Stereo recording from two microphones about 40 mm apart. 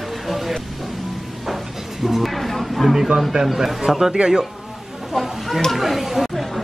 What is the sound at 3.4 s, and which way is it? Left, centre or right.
A man's voice, centre.